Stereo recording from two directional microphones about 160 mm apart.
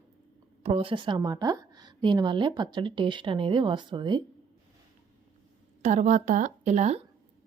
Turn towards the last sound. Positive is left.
turn(degrees=-45)  # may be behind; listen again after turning